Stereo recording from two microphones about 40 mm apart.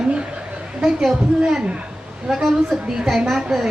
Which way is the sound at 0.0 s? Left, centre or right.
Right.